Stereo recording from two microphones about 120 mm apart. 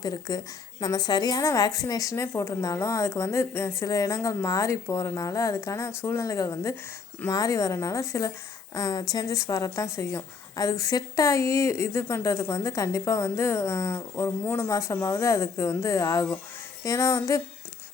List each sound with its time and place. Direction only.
0.0 s a woman's voice: 30° left (ahead or behind)